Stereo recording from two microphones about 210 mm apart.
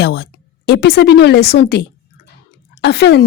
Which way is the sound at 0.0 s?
50° left (ahead or behind).